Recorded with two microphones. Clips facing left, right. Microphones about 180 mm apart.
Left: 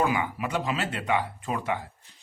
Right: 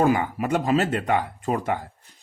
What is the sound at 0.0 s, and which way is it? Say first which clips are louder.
Speech: right 5 dB; 45° right (ahead or behind).